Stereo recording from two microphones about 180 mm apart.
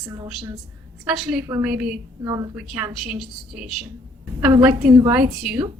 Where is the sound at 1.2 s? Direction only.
5° right (ahead or behind).